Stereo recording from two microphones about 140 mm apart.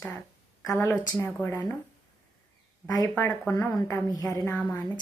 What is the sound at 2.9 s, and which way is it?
A woman's voice, 20° left (ahead or behind).